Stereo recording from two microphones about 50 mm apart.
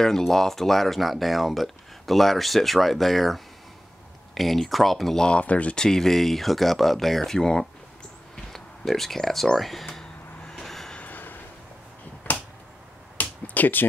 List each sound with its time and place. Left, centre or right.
0.0 s speech: centre
5.4 s speech: left
5.8 s speech: centre
10.4 s train: centre
11.0 s a sound: left
13.2 s a sound: left